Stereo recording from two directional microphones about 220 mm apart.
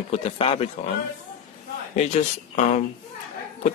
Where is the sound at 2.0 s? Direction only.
30° left (ahead or behind).